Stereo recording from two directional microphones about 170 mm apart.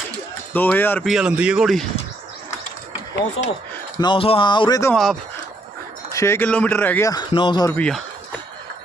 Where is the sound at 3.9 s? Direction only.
30° left (ahead or behind).